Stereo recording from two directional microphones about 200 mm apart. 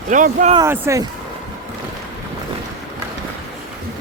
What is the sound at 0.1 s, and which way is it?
Speech, 40° right (ahead or behind).